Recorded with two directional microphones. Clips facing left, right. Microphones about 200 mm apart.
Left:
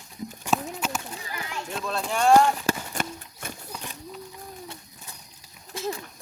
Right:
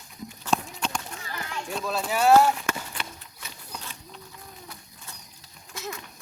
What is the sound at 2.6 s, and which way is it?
Horse, 45° left (ahead or behind).